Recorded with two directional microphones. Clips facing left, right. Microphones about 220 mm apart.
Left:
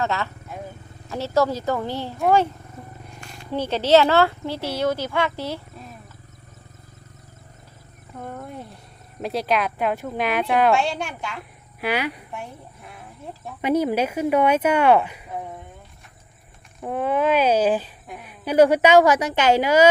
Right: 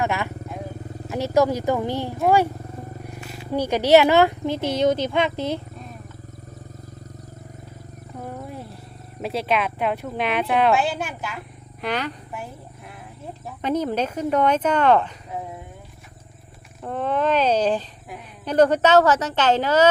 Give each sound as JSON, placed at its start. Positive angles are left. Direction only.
{"t": 0.0, "sound": "speech", "side_deg": -15}
{"t": 8.2, "sound": "wild animals", "side_deg": -5}
{"t": 9.2, "sound": "speech", "side_deg": 0}
{"t": 11.8, "sound": "speech", "side_deg": 10}
{"t": 13.6, "sound": "speech", "side_deg": 10}
{"t": 16.8, "sound": "speech", "side_deg": 10}